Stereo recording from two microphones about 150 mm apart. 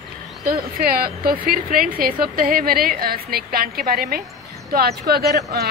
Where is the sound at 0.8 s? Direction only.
90° right.